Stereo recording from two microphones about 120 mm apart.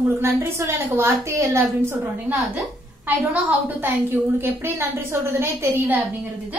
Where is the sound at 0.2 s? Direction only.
20° right (ahead or behind).